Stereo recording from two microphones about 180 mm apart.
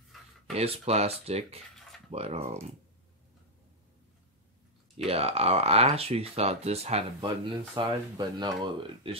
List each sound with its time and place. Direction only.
0.5 s speech: 35° right (ahead or behind)
4.9 s speech: 35° right (ahead or behind)